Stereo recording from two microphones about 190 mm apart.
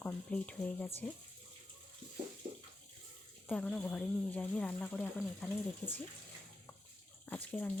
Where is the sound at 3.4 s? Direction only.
5° left (ahead or behind).